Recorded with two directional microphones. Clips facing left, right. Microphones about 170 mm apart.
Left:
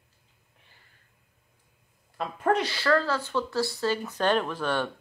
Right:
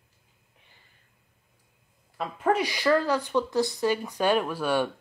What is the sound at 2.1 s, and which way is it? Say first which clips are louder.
Speech: even; centre (ahead or behind).